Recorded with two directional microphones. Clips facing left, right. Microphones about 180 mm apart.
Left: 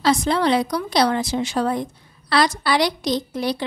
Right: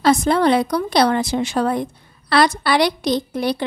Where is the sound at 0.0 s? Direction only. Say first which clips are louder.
Right 3 dB; 50° right (ahead or behind).